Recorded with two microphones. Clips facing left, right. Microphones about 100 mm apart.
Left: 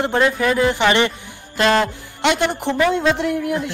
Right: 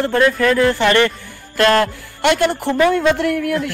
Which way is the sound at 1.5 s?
55° right (ahead or behind).